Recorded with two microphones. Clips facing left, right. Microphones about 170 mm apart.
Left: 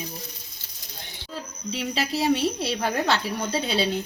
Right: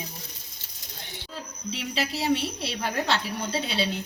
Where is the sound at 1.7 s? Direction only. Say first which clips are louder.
Left 3 dB; 40° left (ahead or behind).